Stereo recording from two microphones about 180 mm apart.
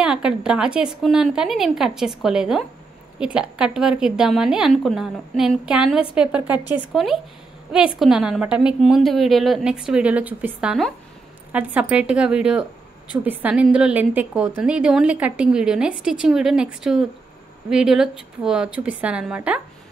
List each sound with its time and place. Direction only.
0.0 s a woman's voice: 5° right (ahead or behind)